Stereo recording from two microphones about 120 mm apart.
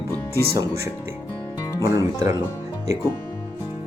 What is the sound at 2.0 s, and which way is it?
Speech, 25° right (ahead or behind).